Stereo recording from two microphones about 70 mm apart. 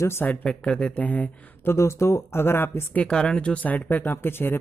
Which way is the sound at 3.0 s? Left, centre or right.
Centre.